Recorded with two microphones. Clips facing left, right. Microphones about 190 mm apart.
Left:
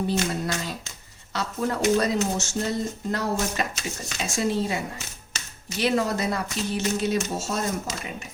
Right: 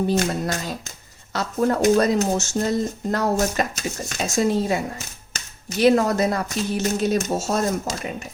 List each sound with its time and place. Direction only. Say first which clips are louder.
0.1 s speech: right 4 dB; 45° right (ahead or behind)